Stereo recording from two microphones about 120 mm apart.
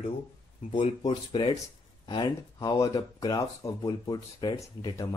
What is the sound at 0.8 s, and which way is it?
Speech, 45° left (ahead or behind).